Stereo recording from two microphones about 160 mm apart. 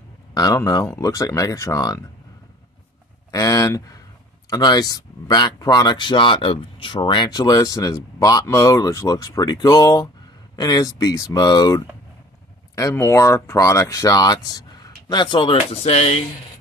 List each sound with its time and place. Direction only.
0.3 s speech: 20° left (ahead or behind)
3.3 s speech: 20° left (ahead or behind); by 16.2 s 40° left (ahead or behind)